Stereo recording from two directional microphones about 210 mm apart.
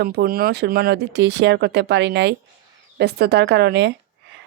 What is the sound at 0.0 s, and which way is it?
Speech, 50° right (ahead or behind).